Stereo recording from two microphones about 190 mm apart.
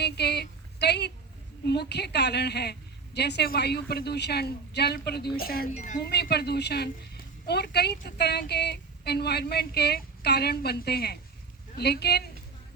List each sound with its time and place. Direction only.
0.0 s a sound: 60° left (ahead or behind)
1.6 s a woman's voice: 60° left (ahead or behind)
5.7 s speech: 40° left (ahead or behind)
6.0 s a woman's voice: 60° left (ahead or behind)